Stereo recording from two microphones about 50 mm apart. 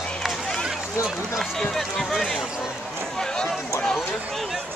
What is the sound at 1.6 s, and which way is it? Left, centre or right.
Speech, centre.